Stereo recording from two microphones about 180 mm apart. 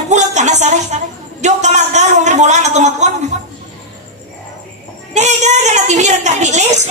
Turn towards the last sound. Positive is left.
turn(degrees=-40)  # may be behind; listen again after turning